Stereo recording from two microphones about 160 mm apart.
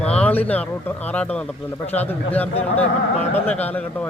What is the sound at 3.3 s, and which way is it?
Speech, 10° left (ahead or behind).